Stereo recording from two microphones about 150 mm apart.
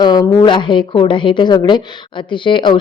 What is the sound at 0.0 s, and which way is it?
A woman's voice, 30° left (ahead or behind).